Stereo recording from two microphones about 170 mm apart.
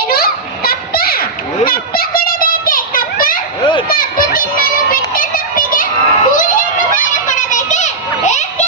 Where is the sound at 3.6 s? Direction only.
25° left (ahead or behind).